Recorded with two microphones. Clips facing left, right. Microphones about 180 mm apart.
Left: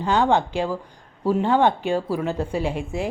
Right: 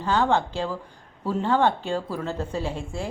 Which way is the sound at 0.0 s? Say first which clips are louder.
Left 3 dB; 15° left (ahead or behind).